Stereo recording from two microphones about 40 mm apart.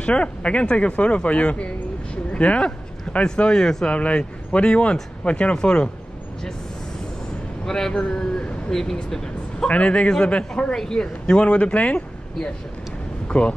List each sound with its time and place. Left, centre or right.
0.0 s speech: left
7.6 s speech: centre
9.7 s speech: left